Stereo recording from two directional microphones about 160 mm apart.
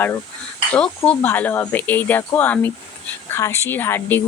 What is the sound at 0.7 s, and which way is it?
Speech, 10° left (ahead or behind).